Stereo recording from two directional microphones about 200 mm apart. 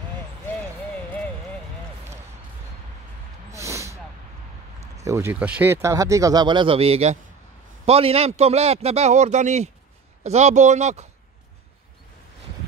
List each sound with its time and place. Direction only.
3.5 s vehicle: 15° right (ahead or behind)
5.0 s a man's voice: 15° right (ahead or behind); by 11.1 s 35° right (ahead or behind)